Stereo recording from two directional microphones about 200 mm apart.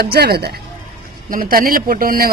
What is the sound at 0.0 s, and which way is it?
Speech, 50° right (ahead or behind).